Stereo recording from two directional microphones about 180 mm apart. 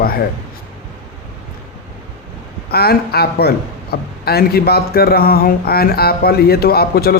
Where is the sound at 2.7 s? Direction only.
60° left (ahead or behind).